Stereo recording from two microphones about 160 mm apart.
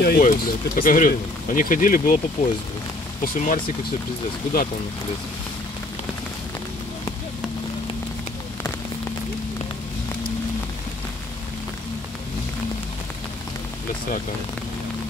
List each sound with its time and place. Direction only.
0.0 s speech: 65° left (ahead or behind)